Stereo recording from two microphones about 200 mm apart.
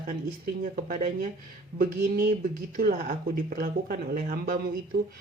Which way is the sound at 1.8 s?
45° right (ahead or behind).